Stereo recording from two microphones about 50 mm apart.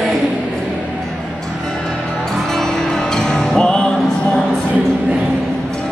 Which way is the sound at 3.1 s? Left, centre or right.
Centre.